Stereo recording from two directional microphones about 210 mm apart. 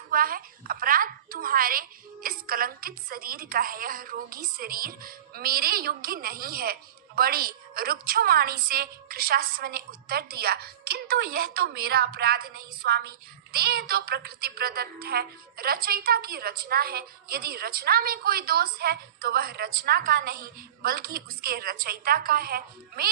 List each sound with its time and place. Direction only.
0.1 s a woman's voice: 45° right (ahead or behind)